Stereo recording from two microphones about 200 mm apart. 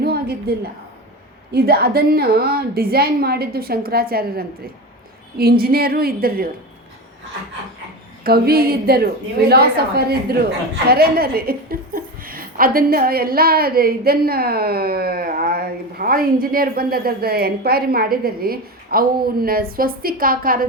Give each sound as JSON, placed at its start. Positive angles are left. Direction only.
{"t": 0.0, "sound": "a sound", "side_deg": -50}
{"t": 1.5, "sound": "a woman's voice", "side_deg": -50}
{"t": 8.2, "sound": "a woman's voice", "side_deg": -50}